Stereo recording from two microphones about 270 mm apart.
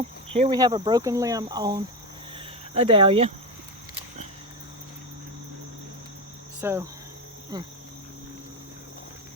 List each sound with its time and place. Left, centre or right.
0.3 s speech: centre
2.3 s a sound: centre
6.6 s speech: centre